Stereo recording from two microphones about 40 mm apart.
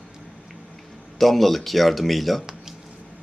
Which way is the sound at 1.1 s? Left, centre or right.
Centre.